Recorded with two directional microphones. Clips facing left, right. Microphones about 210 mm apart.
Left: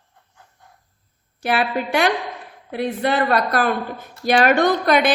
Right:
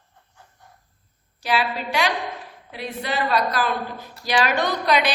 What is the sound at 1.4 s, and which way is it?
A woman's voice, 55° left (ahead or behind).